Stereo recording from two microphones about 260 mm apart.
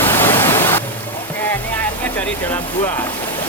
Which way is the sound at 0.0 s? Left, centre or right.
Centre.